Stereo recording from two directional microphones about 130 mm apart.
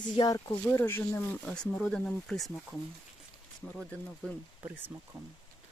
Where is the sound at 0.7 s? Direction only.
15° left (ahead or behind).